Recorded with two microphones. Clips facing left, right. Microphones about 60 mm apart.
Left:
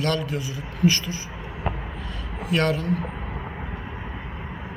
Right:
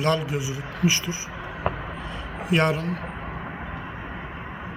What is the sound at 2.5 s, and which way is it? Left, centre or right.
Speech, centre.